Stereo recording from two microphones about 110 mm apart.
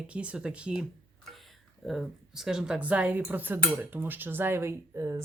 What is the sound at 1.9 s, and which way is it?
Speech, 5° right (ahead or behind).